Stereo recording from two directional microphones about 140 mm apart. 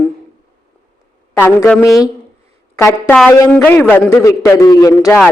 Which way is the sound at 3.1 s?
10° left (ahead or behind).